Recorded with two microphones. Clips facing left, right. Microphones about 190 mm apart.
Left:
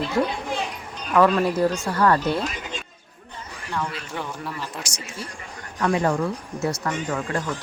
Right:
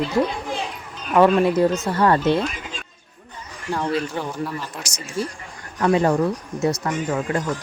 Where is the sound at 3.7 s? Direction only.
35° right (ahead or behind).